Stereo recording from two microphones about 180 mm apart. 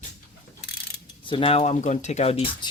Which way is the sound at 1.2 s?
30° left (ahead or behind).